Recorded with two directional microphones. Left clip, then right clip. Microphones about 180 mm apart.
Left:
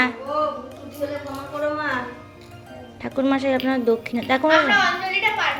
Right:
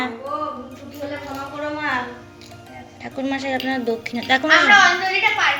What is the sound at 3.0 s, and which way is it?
Speech, 30° left (ahead or behind).